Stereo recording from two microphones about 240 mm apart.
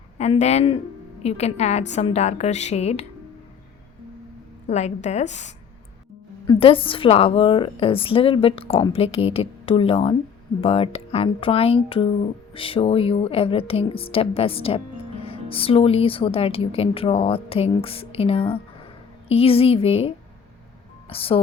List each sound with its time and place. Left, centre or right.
0.2 s a woman's voice: left
4.6 s a woman's voice: left